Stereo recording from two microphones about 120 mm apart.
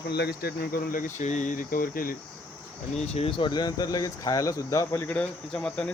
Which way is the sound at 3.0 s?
60° left (ahead or behind).